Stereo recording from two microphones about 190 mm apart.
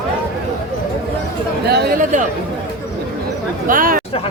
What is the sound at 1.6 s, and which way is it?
Speech, 60° right (ahead or behind).